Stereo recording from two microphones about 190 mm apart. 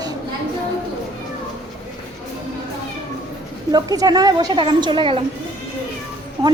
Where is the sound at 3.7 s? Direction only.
20° right (ahead or behind).